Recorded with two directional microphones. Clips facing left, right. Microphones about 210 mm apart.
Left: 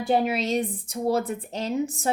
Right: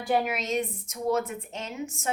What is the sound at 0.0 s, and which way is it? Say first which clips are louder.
Speech: left 4 dB; 30° left (ahead or behind).